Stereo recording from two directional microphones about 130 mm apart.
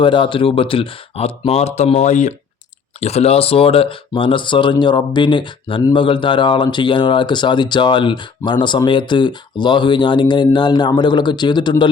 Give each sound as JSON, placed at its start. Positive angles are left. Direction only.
{"t": 0.0, "sound": "speech", "side_deg": 40}
{"t": 3.0, "sound": "speech", "side_deg": 55}